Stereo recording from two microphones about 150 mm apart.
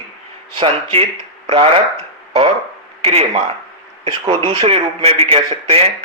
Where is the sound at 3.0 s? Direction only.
40° right (ahead or behind).